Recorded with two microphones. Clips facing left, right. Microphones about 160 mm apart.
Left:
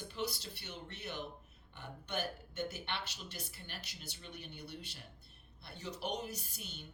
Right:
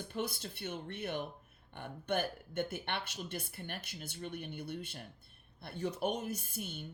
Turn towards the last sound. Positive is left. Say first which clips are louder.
# right 7 dB
turn(degrees=-55)  # may be behind; listen again after turning